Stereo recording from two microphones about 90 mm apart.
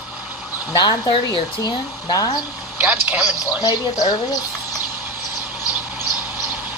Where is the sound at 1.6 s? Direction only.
45° left (ahead or behind).